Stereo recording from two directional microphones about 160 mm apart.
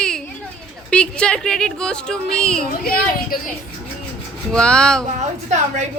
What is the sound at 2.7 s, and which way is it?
Speech, 65° left (ahead or behind).